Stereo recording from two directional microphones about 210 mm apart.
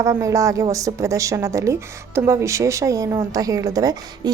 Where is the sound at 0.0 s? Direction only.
15° right (ahead or behind).